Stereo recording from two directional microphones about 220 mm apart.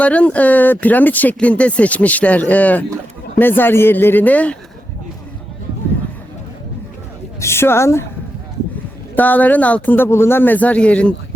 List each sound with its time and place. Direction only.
0.0 s speech: 5° left (ahead or behind)
7.3 s speech: 10° left (ahead or behind)
9.1 s speech: 10° left (ahead or behind)